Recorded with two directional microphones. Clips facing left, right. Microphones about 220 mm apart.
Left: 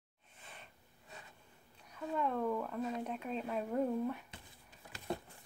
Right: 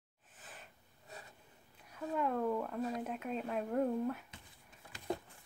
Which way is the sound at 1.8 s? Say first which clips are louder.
Right 1 dB; 5° right (ahead or behind).